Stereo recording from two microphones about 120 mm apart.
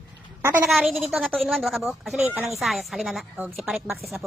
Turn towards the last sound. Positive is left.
turn(degrees=0)  # may be behind; listen again after turning